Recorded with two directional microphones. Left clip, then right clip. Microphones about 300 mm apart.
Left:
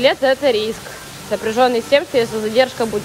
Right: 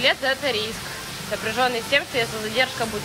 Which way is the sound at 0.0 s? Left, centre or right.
Left.